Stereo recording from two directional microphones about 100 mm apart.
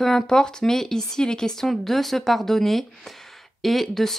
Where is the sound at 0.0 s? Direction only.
5° left (ahead or behind).